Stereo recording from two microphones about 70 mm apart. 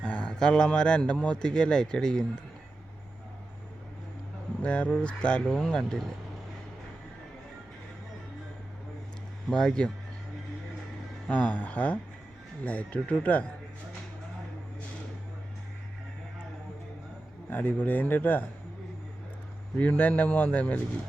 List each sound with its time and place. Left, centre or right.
0.0 s speech: centre
4.6 s speech: centre
9.5 s speech: centre
11.3 s speech: left
17.5 s speech: left
19.7 s speech: left